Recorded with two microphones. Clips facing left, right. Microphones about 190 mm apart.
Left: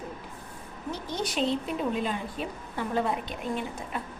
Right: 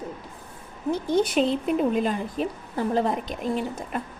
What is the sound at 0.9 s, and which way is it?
Speech, 55° right (ahead or behind).